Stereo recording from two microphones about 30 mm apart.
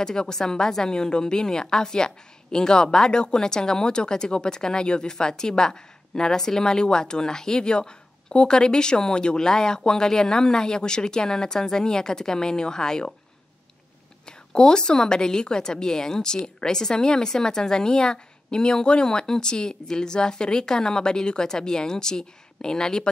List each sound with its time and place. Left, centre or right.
0.0 s a woman's voice: left
14.2 s a woman's voice: left